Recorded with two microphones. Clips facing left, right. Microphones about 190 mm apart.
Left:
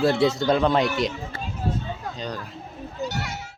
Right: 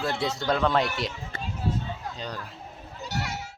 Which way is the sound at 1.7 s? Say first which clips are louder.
Left 1 dB; 45° left (ahead or behind).